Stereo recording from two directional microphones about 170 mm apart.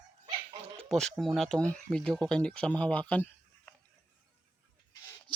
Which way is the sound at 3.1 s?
10° left (ahead or behind).